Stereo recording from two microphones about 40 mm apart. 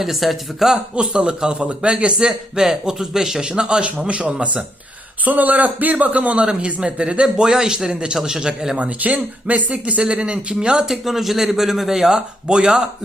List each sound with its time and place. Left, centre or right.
0.0 s speech: centre
0.9 s a man's voice: right
2.1 s a man's voice: centre
5.2 s speech: right
7.4 s a man's voice: centre
8.8 s a man's voice: right; by 10.8 s centre
10.8 s a man's voice: centre